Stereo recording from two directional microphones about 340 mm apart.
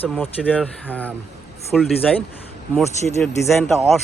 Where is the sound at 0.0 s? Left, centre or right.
Centre.